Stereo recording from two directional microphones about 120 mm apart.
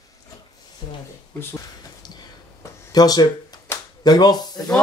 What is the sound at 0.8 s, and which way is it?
Speech, 40° left (ahead or behind).